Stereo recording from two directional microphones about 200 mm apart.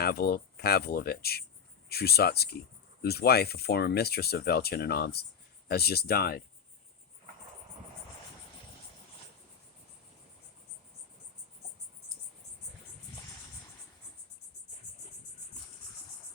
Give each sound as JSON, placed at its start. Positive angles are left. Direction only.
{"t": 0.0, "sound": "speech", "side_deg": 50}